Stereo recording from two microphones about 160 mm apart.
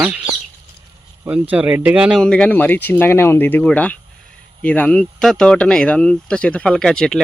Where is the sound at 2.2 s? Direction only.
5° left (ahead or behind).